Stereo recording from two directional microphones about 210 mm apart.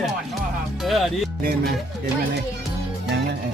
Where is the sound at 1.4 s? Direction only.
50° right (ahead or behind).